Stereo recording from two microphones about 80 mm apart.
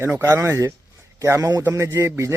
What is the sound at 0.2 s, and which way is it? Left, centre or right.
A man's voice, right.